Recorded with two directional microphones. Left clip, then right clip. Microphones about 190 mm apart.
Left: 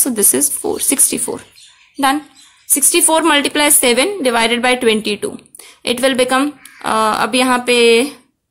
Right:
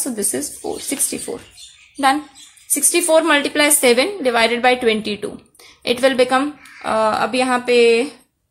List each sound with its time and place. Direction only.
0.0 s a woman's voice: 35° left (ahead or behind)
2.7 s a woman's voice: 35° left (ahead or behind)